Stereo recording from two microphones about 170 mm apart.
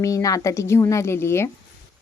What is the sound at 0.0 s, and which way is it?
A woman's voice, 20° left (ahead or behind).